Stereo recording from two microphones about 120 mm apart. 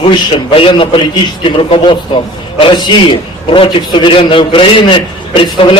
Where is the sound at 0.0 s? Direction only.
45° left (ahead or behind).